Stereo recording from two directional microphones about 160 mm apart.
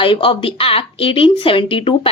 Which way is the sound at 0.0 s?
35° left (ahead or behind).